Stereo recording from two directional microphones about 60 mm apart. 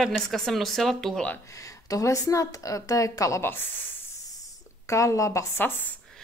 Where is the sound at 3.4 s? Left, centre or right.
Left.